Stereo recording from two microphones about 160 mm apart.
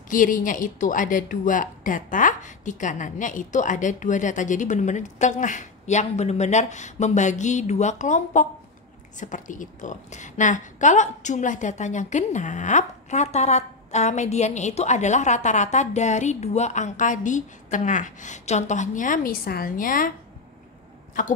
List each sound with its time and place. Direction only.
0.1 s a woman's voice: 55° left (ahead or behind)
21.2 s speech: 55° left (ahead or behind)